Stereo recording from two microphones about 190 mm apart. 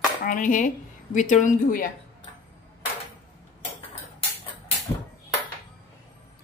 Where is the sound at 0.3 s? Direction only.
40° left (ahead or behind).